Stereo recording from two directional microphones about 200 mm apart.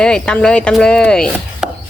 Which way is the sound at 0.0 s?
5° left (ahead or behind).